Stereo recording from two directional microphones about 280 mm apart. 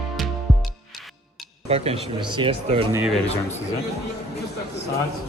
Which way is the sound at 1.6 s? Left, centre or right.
Right.